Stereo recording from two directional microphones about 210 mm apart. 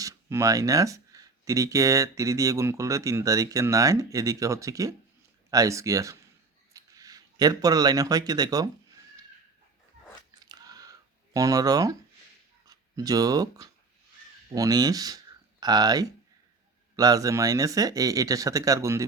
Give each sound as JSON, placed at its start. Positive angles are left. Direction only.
{"t": 0.0, "sound": "speech", "side_deg": -15}
{"t": 10.4, "sound": "a sound", "side_deg": -15}
{"t": 11.3, "sound": "speech", "side_deg": -15}